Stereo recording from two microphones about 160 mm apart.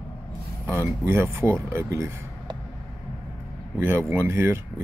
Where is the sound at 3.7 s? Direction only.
15° right (ahead or behind).